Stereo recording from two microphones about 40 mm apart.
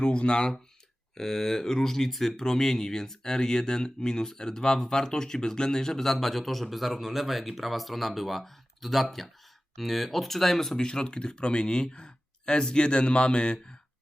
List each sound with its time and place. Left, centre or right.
0.0 s speech: left
1.1 s speech: centre
10.8 s speech: centre